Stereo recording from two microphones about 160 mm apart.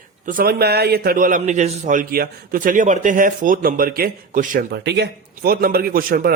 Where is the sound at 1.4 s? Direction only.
45° right (ahead or behind).